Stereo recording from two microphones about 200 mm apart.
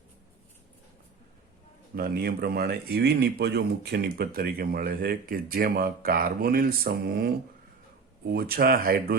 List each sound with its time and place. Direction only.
2.0 s speech: 50° right (ahead or behind)
8.3 s speech: 50° right (ahead or behind)